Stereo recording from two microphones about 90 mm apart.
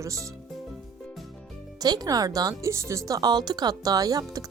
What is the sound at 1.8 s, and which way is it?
Speech, 45° right (ahead or behind).